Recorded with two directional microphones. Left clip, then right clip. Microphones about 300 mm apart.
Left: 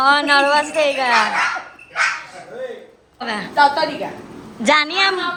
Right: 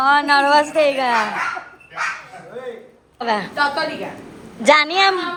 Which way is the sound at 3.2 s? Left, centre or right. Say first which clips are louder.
Right 4 dB; centre.